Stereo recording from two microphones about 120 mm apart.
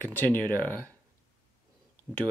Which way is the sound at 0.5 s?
25° right (ahead or behind).